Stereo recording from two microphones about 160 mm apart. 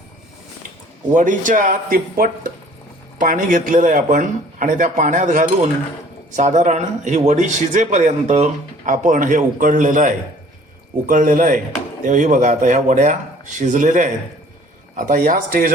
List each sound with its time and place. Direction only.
1.1 s a man's voice: 55° right (ahead or behind)